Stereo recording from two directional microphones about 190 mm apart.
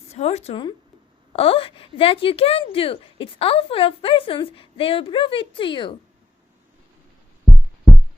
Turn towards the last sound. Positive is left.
turn(degrees=0)  # may be behind; listen again after turning